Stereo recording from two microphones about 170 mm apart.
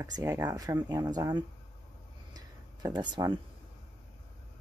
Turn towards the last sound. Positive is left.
turn(degrees=-25)  # may be behind; listen again after turning